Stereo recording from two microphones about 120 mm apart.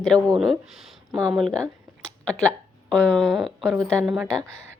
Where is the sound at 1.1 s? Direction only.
30° right (ahead or behind).